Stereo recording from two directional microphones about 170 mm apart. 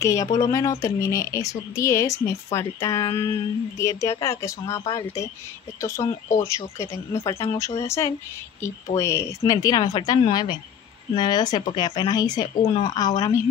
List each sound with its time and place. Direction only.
0.0 s speech: 20° left (ahead or behind)